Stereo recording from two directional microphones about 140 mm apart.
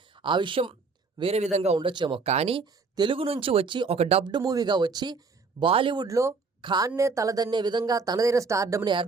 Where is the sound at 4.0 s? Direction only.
45° right (ahead or behind).